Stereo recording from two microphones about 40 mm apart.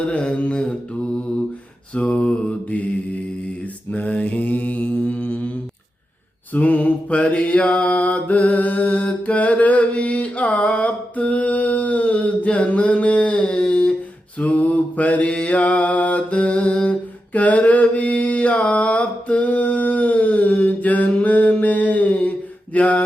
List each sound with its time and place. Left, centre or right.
0.1 s mantra: left
2.0 s mantra: left
3.9 s mantra: left
6.5 s mantra: left
14.3 s mantra: left
17.3 s mantra: left